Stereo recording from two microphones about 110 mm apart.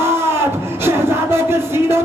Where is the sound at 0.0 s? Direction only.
20° right (ahead or behind).